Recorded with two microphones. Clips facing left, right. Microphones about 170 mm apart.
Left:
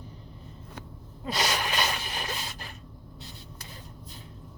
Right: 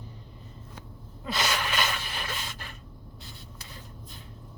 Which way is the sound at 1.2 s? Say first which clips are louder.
Left 1 dB; 35° left (ahead or behind).